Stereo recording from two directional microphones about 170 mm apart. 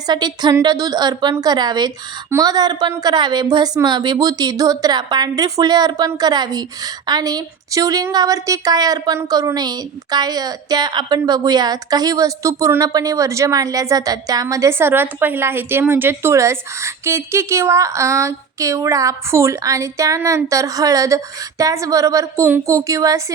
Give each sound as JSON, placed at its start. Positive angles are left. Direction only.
{"t": 0.1, "sound": "a woman's voice", "side_deg": -25}